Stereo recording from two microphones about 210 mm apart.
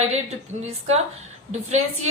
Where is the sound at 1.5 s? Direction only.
35° right (ahead or behind).